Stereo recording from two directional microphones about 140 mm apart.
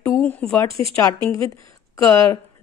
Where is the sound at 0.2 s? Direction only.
5° left (ahead or behind).